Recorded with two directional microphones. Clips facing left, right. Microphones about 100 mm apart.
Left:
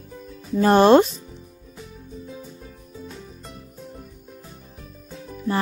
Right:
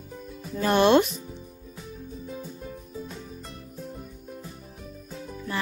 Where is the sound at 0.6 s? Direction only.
35° left (ahead or behind).